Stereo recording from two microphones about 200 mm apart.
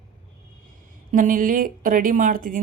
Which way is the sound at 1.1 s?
40° right (ahead or behind).